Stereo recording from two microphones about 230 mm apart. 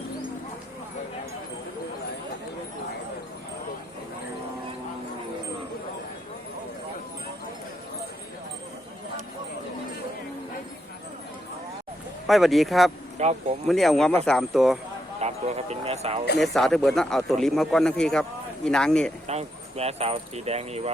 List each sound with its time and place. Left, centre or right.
12.3 s speech: centre
13.1 s speech: right
13.7 s speech: centre
15.2 s speech: right
16.4 s speech: centre
19.3 s speech: right